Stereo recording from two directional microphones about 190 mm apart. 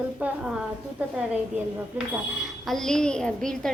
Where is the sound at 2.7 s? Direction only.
Centre (ahead or behind).